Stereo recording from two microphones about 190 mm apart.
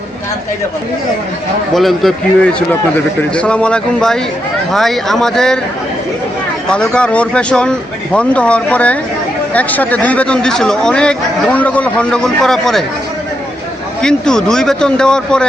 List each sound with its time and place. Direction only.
1.7 s speech: centre (ahead or behind)
6.7 s speech: 5° left (ahead or behind)
14.0 s speech: 5° left (ahead or behind)